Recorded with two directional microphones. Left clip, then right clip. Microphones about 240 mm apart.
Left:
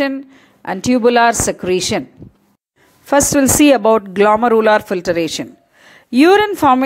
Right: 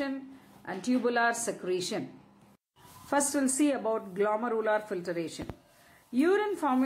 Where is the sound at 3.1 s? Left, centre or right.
Left.